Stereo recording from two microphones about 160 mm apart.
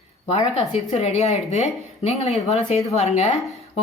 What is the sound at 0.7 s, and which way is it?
Speech, 40° left (ahead or behind).